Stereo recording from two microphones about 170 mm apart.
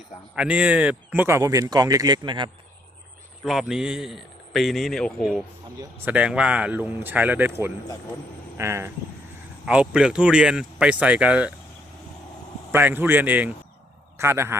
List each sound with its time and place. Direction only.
0.3 s speech: 5° right (ahead or behind); by 2.5 s 25° right (ahead or behind)
3.4 s speech: centre (ahead or behind)
12.7 s speech: 10° right (ahead or behind)